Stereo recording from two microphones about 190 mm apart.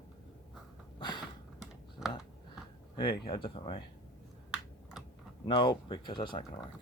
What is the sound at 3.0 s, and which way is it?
Speech, 25° left (ahead or behind).